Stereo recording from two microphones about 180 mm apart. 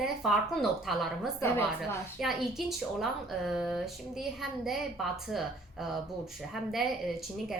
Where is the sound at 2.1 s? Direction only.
Centre (ahead or behind).